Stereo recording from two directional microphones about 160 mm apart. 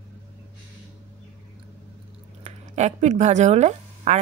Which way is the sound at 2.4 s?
45° right (ahead or behind).